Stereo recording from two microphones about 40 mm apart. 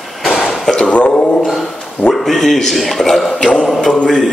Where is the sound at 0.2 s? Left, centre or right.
Centre.